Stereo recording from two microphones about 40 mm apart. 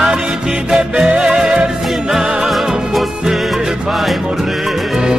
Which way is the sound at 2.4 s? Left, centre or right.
Centre.